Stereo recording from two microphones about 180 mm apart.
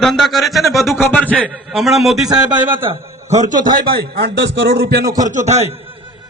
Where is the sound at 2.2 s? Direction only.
20° right (ahead or behind).